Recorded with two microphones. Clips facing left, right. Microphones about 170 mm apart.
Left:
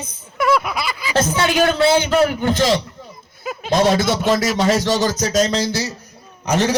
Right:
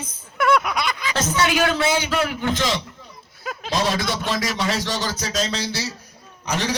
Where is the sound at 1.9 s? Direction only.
50° left (ahead or behind).